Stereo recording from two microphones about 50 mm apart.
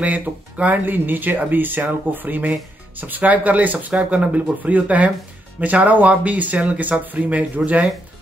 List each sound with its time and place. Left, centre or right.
0.0 s speech: right